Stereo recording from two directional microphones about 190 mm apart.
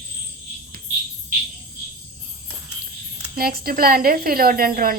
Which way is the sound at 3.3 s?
50° right (ahead or behind).